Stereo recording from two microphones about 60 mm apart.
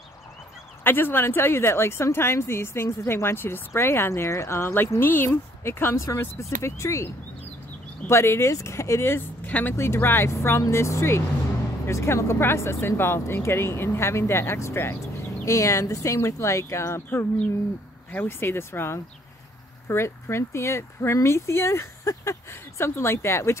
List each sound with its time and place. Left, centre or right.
0.8 s a woman's voice: left
5.9 s speech: left
8.1 s a woman's voice: left
9.5 s speech: left
9.8 s a woman's voice: left
15.4 s speech: left
18.1 s a woman's voice: left